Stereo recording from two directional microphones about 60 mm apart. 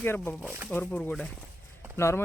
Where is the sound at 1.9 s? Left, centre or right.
Left.